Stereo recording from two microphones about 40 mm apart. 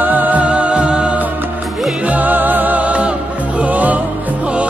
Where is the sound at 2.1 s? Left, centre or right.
Right.